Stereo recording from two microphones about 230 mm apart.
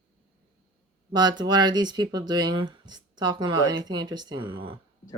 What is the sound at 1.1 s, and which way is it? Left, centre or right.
Speech, centre.